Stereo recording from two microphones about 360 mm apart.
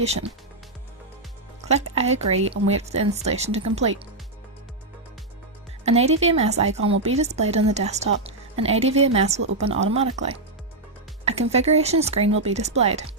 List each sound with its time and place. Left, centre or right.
0.0 s speech: centre
1.6 s speech: centre
5.8 s a woman's voice: centre